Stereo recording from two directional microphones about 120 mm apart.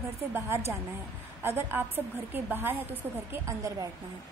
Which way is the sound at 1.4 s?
15° right (ahead or behind).